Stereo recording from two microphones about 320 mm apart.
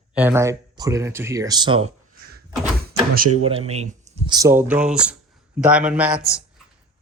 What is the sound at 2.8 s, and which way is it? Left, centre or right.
Door, right.